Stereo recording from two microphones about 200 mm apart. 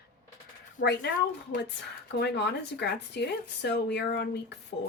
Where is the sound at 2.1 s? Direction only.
55° left (ahead or behind).